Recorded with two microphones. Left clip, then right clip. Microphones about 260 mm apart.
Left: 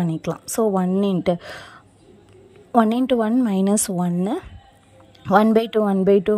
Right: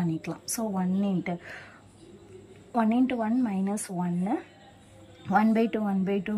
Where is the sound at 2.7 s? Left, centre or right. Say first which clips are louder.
Left 9 dB; left.